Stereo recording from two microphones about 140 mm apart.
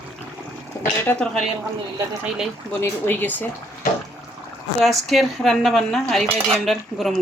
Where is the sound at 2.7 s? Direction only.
15° left (ahead or behind).